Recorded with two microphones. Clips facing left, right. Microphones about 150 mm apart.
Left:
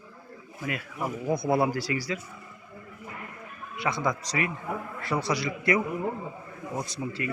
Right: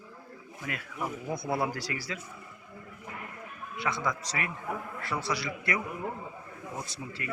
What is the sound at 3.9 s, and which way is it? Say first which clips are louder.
A man's voice: left 4 dB; 20° left (ahead or behind).